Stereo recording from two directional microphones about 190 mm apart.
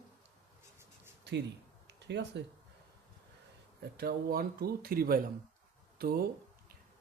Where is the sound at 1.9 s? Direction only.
65° right (ahead or behind).